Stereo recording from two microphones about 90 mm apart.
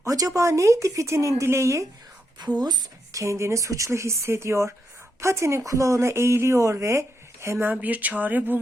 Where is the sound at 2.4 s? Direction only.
50° right (ahead or behind).